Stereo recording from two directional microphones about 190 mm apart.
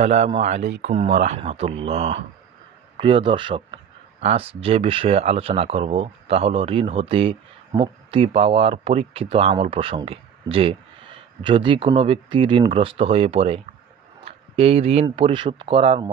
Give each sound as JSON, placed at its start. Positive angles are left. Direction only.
{"t": 0.0, "sound": "speech", "side_deg": -35}